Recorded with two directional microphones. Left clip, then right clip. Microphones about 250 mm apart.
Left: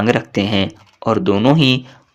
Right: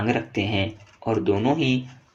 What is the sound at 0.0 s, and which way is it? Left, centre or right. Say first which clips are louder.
Speech: left 8 dB; left.